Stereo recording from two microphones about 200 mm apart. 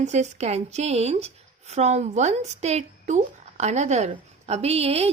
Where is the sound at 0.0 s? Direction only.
35° right (ahead or behind).